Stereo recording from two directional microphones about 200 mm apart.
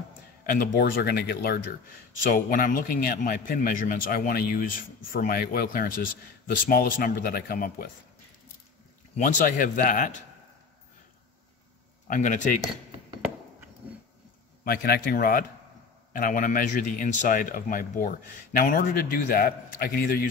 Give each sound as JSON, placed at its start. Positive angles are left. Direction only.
{"t": 0.5, "sound": "a man's voice", "side_deg": 50}
{"t": 9.1, "sound": "speech", "side_deg": 40}
{"t": 12.1, "sound": "speech", "side_deg": 40}
{"t": 14.6, "sound": "a man's voice", "side_deg": 45}